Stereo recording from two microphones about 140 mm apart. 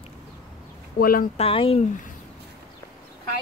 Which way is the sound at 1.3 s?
45° left (ahead or behind).